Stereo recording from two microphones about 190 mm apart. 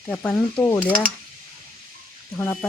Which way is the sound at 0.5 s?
25° left (ahead or behind).